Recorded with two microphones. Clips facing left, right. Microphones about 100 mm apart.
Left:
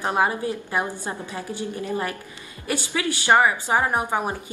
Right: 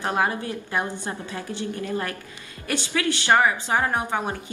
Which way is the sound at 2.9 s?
15° left (ahead or behind).